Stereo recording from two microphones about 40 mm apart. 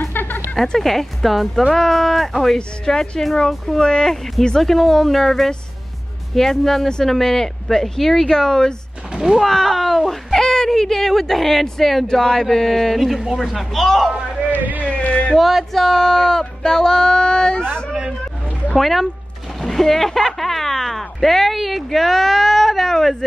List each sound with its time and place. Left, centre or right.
0.1 s music: left
0.7 s speech: centre
9.1 s speech: centre
9.4 s speech: centre
10.4 s speech: centre
14.1 s a sound: centre
14.5 s a sound: right
14.8 s a sound: left
15.3 s speech: centre
15.8 s speech: centre
18.8 s speech: centre